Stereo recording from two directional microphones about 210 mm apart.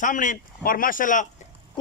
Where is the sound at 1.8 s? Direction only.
20° left (ahead or behind).